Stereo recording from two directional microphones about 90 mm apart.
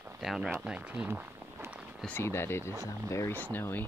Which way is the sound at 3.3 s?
20° left (ahead or behind).